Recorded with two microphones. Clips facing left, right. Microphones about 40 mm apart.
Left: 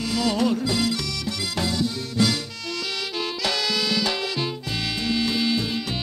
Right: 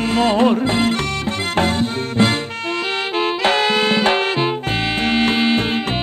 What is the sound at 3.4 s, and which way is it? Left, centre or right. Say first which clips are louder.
Music: right 8 dB; right.